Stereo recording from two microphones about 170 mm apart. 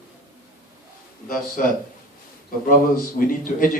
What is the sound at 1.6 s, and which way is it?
Speech, 55° left (ahead or behind).